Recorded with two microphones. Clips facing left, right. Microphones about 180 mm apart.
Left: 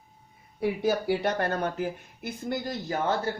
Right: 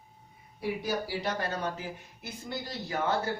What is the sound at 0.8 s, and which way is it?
Speech, 55° left (ahead or behind).